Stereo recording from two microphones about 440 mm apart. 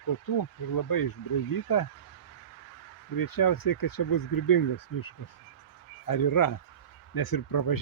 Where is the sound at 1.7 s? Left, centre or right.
Left.